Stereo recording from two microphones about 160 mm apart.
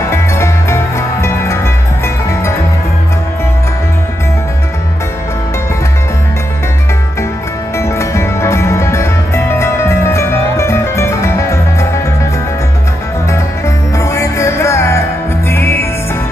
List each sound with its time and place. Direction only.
0.1 s music: 15° left (ahead or behind)
7.7 s music: 15° left (ahead or behind)
13.9 s music: 20° left (ahead or behind)